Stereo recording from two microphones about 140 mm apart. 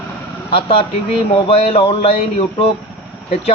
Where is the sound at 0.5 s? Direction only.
40° left (ahead or behind).